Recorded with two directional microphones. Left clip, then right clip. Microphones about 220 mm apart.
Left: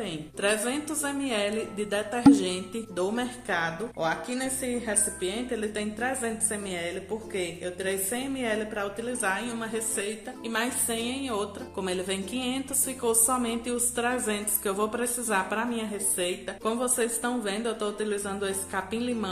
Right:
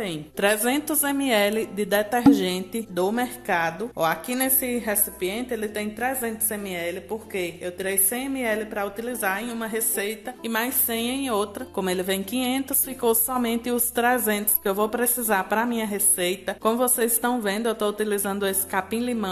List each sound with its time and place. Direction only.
0.0 s a woman's voice: 30° right (ahead or behind)